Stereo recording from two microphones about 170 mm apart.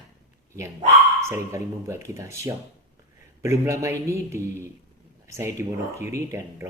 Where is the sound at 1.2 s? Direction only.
15° right (ahead or behind).